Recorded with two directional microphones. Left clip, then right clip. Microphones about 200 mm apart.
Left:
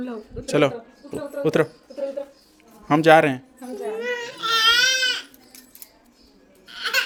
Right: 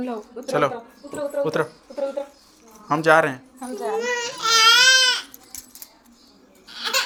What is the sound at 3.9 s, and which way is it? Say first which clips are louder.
Baby cry: right 4 dB; 5° left (ahead or behind).